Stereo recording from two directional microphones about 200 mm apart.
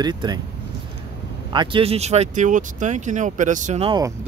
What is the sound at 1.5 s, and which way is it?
Speech, 25° right (ahead or behind).